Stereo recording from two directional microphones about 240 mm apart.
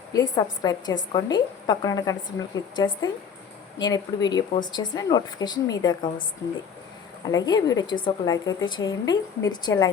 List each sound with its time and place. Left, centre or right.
0.1 s a woman's voice: centre
7.3 s a woman's voice: centre